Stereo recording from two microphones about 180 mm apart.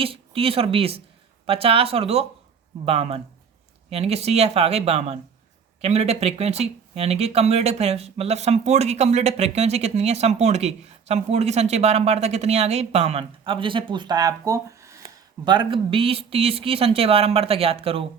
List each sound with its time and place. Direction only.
0.0 s speech: 30° right (ahead or behind)